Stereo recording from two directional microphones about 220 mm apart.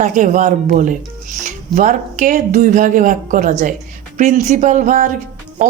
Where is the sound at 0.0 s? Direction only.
35° right (ahead or behind).